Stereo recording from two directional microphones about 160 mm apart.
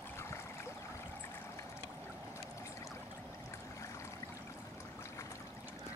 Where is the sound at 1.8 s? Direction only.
10° right (ahead or behind).